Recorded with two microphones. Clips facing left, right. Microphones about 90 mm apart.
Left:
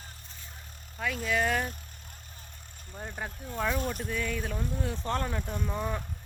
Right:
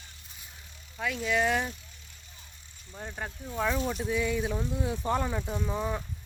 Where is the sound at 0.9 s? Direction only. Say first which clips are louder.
Right 1 dB; centre (ahead or behind).